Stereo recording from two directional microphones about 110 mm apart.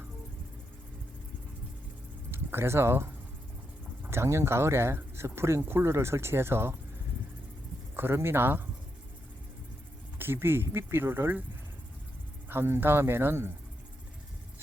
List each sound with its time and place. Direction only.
2.3 s speech: 20° right (ahead or behind)
7.9 s speech: 20° right (ahead or behind)
10.2 s speech: 20° right (ahead or behind)
12.5 s speech: 20° right (ahead or behind)